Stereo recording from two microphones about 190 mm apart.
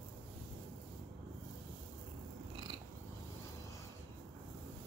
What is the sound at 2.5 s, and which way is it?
Cat, 25° right (ahead or behind).